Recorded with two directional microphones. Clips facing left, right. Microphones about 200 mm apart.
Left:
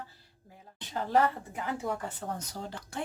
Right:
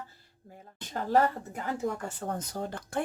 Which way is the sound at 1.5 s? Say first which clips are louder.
Right 2 dB; 45° right (ahead or behind).